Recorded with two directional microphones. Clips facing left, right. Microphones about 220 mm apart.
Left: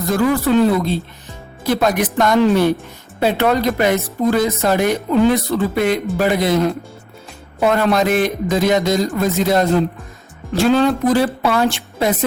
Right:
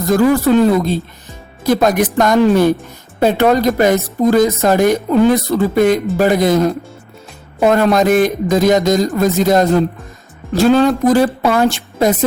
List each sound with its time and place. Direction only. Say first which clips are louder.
0.1 s speech: right 4 dB; 40° right (ahead or behind)